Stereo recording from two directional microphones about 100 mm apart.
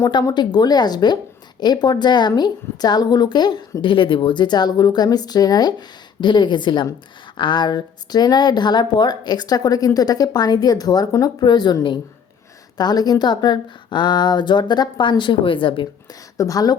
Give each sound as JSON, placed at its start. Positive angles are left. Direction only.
{"t": 0.1, "sound": "a woman's voice", "side_deg": 45}
{"t": 16.4, "sound": "speech", "side_deg": 35}